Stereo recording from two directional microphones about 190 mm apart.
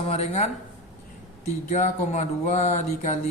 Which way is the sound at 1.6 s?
40° left (ahead or behind).